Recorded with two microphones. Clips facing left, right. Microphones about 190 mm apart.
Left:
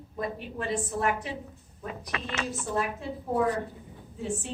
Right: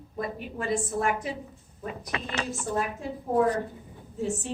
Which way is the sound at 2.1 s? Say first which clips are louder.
Right 2 dB; 35° right (ahead or behind).